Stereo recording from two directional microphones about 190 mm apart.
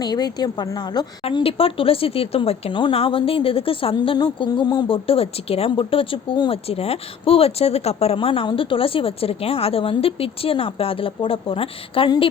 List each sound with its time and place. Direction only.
0.0 s a woman's voice: 20° left (ahead or behind)